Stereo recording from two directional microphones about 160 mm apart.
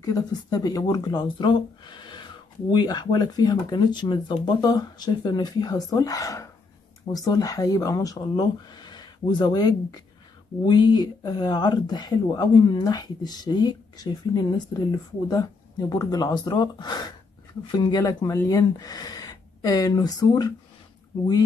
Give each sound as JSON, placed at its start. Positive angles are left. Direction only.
{"t": 0.0, "sound": "speech", "side_deg": 20}
{"t": 15.9, "sound": "speech", "side_deg": 20}